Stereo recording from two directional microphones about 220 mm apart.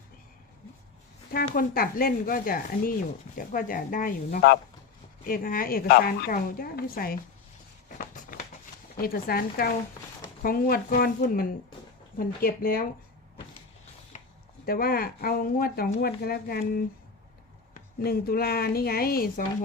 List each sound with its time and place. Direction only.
1.3 s a woman's voice: 40° left (ahead or behind)
7.9 s a sound: 40° left (ahead or behind)
9.0 s a woman's voice: 40° left (ahead or behind)
14.7 s speech: 40° left (ahead or behind)
18.0 s speech: 45° left (ahead or behind)